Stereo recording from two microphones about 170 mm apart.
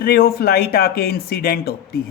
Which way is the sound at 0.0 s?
65° left (ahead or behind).